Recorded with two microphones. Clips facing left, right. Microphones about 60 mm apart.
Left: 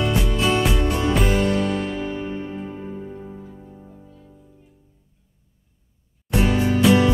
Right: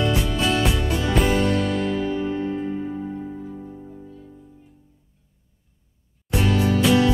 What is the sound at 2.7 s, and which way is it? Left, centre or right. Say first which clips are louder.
Music: right 5 dB; centre.